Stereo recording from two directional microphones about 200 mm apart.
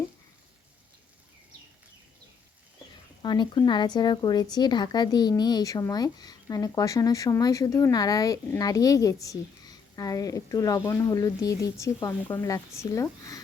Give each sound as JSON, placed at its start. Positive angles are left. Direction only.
{"t": 3.2, "sound": "speech", "side_deg": 25}